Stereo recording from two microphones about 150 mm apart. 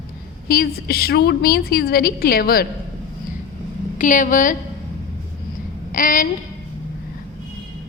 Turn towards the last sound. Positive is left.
turn(degrees=65)  # may be behind; listen again after turning